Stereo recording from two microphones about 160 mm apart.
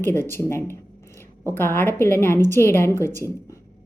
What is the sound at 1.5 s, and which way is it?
A woman's voice, 15° left (ahead or behind).